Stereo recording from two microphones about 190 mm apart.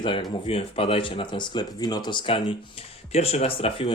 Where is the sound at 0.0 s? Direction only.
25° left (ahead or behind).